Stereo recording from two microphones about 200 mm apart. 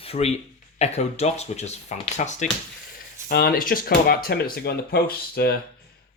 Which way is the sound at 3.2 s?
50° left (ahead or behind).